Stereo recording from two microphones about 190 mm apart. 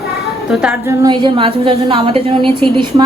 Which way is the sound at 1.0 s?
25° right (ahead or behind).